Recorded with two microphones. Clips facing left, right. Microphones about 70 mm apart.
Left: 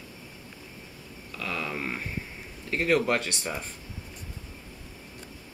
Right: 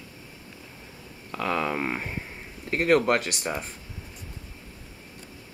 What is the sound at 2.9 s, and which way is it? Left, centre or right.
Speech, centre.